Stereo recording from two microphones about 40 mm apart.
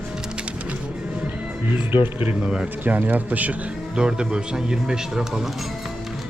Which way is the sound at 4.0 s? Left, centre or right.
Right.